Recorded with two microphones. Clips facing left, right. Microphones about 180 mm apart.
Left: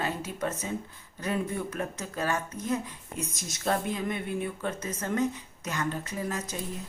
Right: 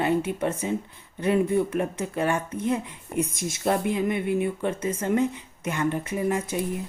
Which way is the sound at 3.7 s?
10° right (ahead or behind).